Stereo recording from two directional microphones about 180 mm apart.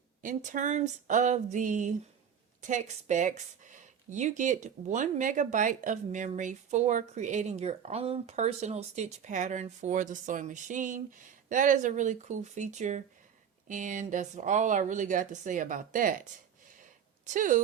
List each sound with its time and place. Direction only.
0.2 s speech: 45° right (ahead or behind)
17.2 s speech: 45° right (ahead or behind)